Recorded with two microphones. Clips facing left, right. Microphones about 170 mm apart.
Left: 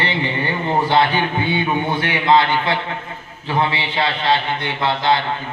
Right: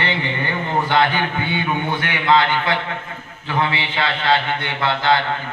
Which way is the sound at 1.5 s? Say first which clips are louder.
Left 2 dB; 30° left (ahead or behind).